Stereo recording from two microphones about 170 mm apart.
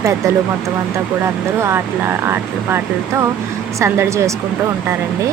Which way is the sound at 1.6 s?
15° right (ahead or behind).